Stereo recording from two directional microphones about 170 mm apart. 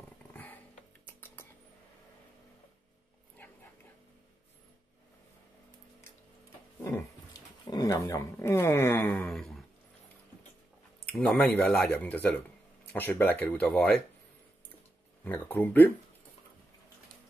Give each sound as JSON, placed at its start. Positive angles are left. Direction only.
{"t": 0.3, "sound": "dog", "side_deg": 10}
{"t": 1.0, "sound": "rodents", "side_deg": 15}
{"t": 6.8, "sound": "a sound", "side_deg": 15}
{"t": 7.6, "sound": "speech", "side_deg": 20}
{"t": 11.1, "sound": "speech", "side_deg": 5}
{"t": 15.2, "sound": "speech", "side_deg": 10}